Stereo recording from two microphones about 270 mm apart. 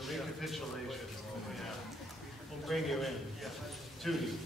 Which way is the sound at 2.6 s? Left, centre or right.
Centre.